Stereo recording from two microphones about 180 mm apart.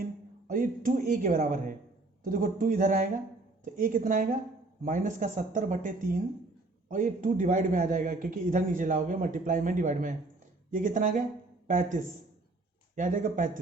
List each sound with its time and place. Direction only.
0.5 s a man's voice: 45° right (ahead or behind)